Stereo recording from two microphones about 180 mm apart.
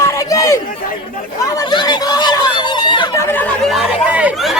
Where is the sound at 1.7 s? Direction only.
25° left (ahead or behind).